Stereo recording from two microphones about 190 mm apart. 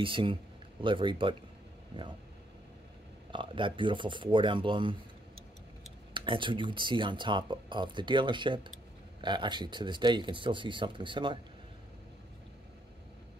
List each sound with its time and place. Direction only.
0.0 s speech: 25° right (ahead or behind)
3.3 s speech: 25° right (ahead or behind)
6.1 s speech: 25° right (ahead or behind)